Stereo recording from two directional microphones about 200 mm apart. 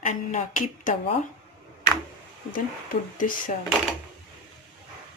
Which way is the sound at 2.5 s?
45° left (ahead or behind).